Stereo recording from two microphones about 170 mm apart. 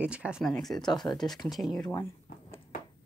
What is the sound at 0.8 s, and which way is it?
Speech, 25° left (ahead or behind).